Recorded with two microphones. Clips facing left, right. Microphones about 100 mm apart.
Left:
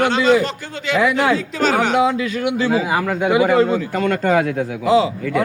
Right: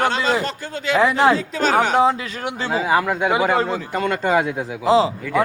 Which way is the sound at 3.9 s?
15° right (ahead or behind).